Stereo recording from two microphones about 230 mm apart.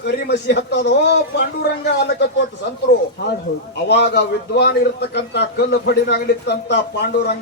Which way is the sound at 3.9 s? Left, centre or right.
Left.